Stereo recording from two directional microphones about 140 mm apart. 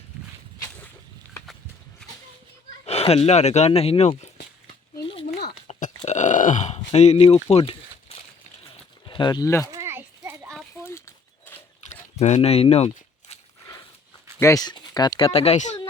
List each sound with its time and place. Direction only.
2.8 s speech: 45° left (ahead or behind)
5.7 s grunt: 55° left (ahead or behind)
7.5 s a sound: 40° left (ahead or behind)
9.0 s speech: 35° left (ahead or behind)
9.7 s children playing: 20° right (ahead or behind)
10.8 s a sound: 15° left (ahead or behind)
12.2 s speech: 50° left (ahead or behind)
14.3 s speech: 20° left (ahead or behind)
15.3 s speech: 50° left (ahead or behind)